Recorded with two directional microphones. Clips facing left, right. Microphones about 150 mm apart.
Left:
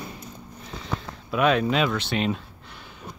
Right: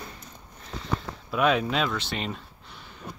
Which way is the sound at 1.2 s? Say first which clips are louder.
Left 2 dB; centre (ahead or behind).